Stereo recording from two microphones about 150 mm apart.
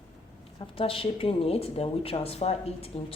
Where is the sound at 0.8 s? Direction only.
40° left (ahead or behind).